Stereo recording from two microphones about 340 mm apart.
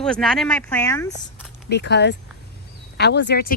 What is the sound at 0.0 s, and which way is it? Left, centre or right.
Speech, centre.